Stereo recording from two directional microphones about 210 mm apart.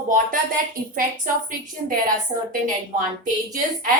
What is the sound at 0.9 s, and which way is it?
Speech, 40° right (ahead or behind).